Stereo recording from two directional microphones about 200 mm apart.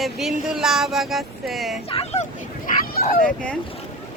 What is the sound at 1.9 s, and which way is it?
Speech, 30° left (ahead or behind).